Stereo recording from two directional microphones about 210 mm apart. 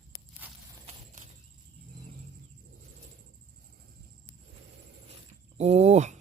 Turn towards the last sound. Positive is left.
turn(degrees=-35)  # may be behind; listen again after turning